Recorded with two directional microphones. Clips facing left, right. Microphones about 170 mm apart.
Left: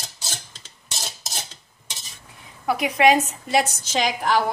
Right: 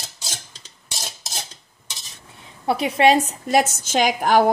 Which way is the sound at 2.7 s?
30° right (ahead or behind).